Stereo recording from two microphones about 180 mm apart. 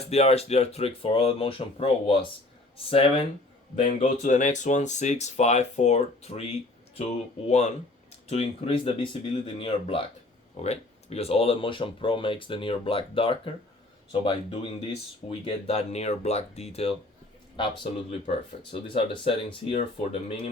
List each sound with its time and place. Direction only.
0.1 s speech: 35° left (ahead or behind)
3.8 s speech: 45° left (ahead or behind)